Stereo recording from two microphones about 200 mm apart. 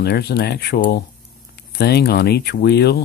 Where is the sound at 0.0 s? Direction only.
55° left (ahead or behind).